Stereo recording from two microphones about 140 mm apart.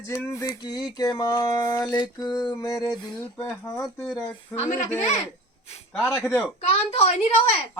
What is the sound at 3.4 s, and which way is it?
Speech, 20° left (ahead or behind).